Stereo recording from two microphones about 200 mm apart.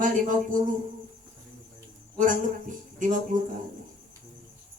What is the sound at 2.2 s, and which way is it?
Speech, 40° right (ahead or behind).